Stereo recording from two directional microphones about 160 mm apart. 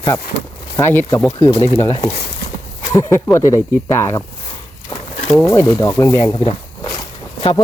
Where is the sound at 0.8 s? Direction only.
15° left (ahead or behind).